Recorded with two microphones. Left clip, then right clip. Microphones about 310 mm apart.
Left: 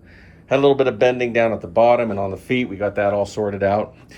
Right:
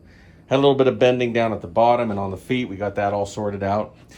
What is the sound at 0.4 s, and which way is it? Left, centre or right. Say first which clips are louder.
Speech: left 1 dB; centre.